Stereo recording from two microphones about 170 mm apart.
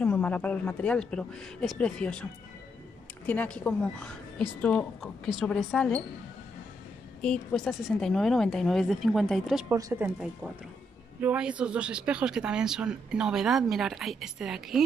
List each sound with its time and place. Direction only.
0.0 s speech: 10° left (ahead or behind)
3.3 s a woman's voice: 10° left (ahead or behind)
7.2 s speech: centre (ahead or behind)
9.7 s speech: 15° right (ahead or behind)
11.1 s speech: 10° right (ahead or behind)